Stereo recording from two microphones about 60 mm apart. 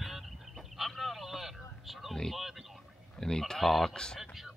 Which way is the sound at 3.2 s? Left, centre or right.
Centre.